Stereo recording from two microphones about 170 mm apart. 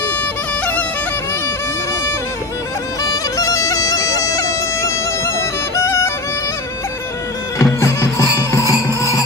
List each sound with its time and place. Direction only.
3.0 s bagpipes: 20° left (ahead or behind)
5.9 s music: 15° left (ahead or behind)
7.5 s music: 20° left (ahead or behind)